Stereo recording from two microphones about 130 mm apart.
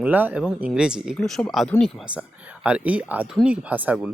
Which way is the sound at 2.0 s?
10° right (ahead or behind).